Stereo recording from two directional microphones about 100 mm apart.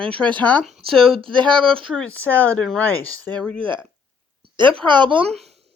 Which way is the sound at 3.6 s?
55° right (ahead or behind).